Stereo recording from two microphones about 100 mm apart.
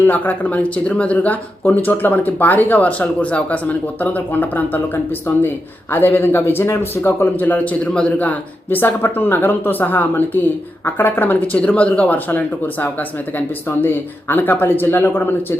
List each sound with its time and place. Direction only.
0.0 s a man's voice: 20° left (ahead or behind)